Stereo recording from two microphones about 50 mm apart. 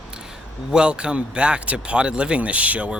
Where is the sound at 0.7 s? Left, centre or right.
Centre.